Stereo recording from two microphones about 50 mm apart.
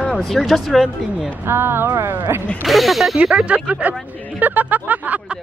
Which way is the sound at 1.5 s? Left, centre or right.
Right.